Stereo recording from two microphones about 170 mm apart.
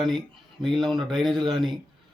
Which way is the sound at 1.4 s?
25° right (ahead or behind).